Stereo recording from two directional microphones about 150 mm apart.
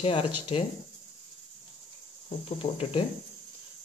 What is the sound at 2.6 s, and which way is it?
Speech, 40° left (ahead or behind).